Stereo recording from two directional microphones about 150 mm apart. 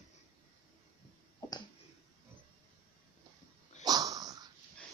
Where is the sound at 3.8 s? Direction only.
25° right (ahead or behind).